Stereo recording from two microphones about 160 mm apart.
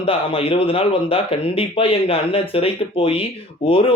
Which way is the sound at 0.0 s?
35° left (ahead or behind).